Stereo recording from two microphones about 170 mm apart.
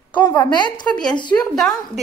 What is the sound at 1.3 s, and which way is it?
Speech, 5° left (ahead or behind).